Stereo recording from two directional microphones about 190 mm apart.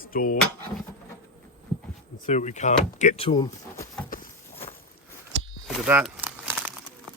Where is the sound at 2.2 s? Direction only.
40° left (ahead or behind); by 3.8 s 20° left (ahead or behind).